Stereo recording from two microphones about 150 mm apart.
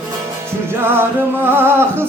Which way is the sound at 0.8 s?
15° right (ahead or behind).